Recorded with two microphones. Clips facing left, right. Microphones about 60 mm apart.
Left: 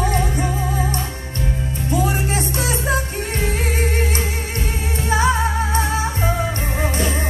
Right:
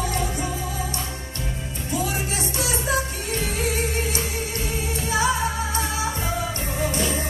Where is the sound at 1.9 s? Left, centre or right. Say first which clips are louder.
Left 6 dB; left.